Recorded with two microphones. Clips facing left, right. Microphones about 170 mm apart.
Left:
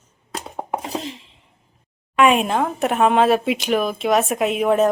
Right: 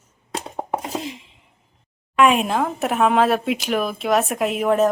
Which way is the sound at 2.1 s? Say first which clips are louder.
Left 1 dB; centre (ahead or behind).